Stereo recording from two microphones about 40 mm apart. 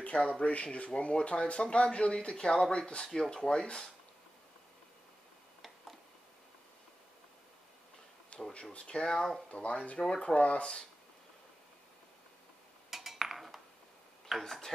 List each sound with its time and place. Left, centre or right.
0.3 s speech: left
3.1 s speech: centre
8.3 s a sound: left
8.8 s speech: centre
9.5 s speech: left
9.9 s speech: left
12.9 s cutlery: centre
14.3 s speech: centre